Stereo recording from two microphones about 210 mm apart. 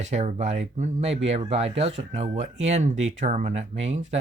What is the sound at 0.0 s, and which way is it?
Speech, 35° right (ahead or behind).